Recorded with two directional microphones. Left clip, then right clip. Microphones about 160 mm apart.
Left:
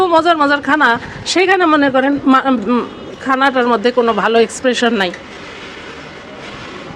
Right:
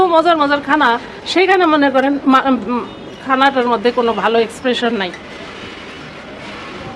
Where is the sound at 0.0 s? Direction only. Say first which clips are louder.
Even; 25° left (ahead or behind).